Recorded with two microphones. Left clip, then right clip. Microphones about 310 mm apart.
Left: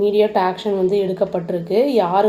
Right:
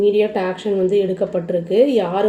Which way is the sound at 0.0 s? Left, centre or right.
Left.